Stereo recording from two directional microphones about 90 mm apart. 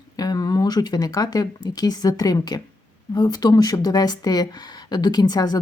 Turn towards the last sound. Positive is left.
turn(degrees=50)  # may be behind; listen again after turning